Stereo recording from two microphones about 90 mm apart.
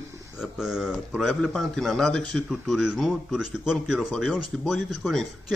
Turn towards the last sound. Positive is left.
turn(degrees=0)  # may be behind; listen again after turning